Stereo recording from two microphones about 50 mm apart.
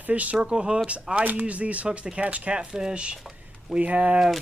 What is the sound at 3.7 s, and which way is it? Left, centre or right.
Speech, right.